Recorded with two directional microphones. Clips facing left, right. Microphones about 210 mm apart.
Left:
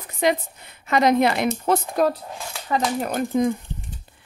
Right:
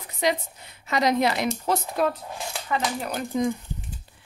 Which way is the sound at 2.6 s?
45° left (ahead or behind).